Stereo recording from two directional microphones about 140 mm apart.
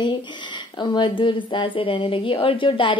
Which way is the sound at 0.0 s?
35° left (ahead or behind).